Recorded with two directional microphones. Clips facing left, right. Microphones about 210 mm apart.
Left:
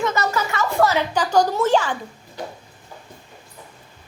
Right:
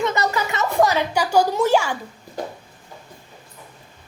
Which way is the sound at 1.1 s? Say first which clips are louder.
Even; 10° right (ahead or behind).